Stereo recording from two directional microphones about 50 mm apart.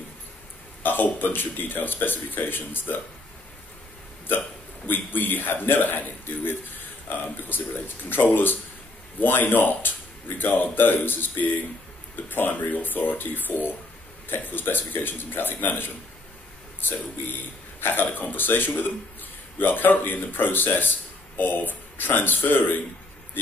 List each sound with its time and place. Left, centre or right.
0.8 s speech: left
4.8 s a man's voice: left
16.9 s speech: left